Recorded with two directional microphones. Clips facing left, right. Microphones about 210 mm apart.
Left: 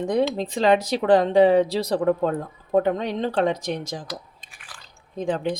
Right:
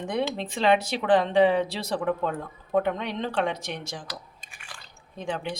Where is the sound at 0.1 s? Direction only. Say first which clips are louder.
Left 5 dB; 40° left (ahead or behind).